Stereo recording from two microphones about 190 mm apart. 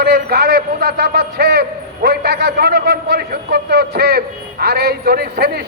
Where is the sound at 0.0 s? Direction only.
55° right (ahead or behind).